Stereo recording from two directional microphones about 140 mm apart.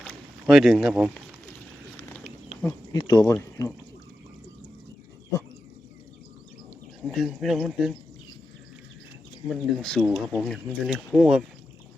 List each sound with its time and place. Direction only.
0.0 s a sound: 5° left (ahead or behind)
2.9 s speech: 30° left (ahead or behind)
7.1 s speech: centre (ahead or behind)
9.5 s speech: centre (ahead or behind)